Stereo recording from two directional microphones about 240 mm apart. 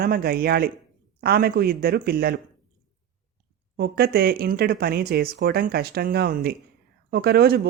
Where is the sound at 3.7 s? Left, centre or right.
Right.